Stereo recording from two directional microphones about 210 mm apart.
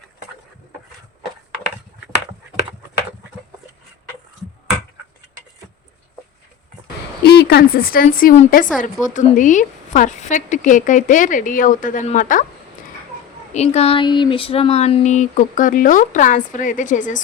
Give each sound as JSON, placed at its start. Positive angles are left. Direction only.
{"t": 7.3, "sound": "a woman's voice", "side_deg": 50}
{"t": 13.5, "sound": "speech", "side_deg": 30}